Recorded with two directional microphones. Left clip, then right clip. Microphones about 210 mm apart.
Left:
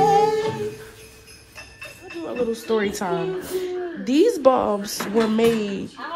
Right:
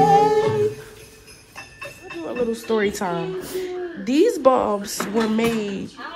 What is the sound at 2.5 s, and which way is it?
Speech, 15° left (ahead or behind).